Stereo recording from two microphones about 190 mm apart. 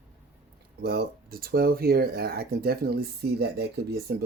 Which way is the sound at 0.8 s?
55° right (ahead or behind).